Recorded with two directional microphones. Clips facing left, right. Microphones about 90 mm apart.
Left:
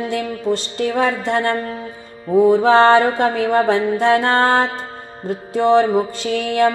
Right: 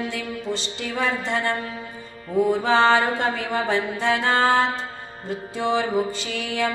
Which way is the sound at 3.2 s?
50° left (ahead or behind).